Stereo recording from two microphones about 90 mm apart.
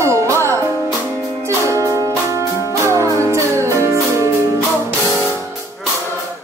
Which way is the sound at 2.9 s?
35° right (ahead or behind).